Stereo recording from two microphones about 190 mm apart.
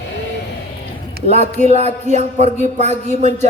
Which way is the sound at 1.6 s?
35° right (ahead or behind).